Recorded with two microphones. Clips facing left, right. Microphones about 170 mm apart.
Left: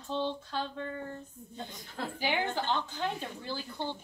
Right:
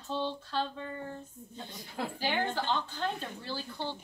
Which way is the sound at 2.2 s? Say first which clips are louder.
Left 1 dB; 15° left (ahead or behind).